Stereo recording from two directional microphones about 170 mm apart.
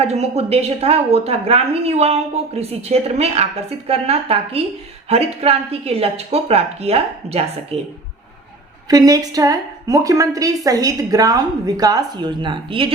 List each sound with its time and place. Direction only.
0.0 s a woman's voice: 40° right (ahead or behind)
8.9 s a woman's voice: 20° right (ahead or behind)